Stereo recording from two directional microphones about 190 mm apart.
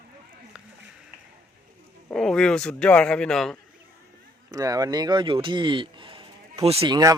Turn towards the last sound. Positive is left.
turn(degrees=-20)  # may be behind; listen again after turning